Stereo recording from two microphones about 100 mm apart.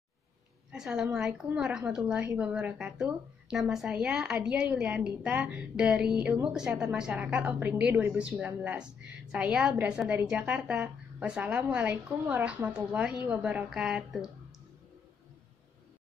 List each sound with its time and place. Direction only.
0.7 s a woman's voice: 10° right (ahead or behind)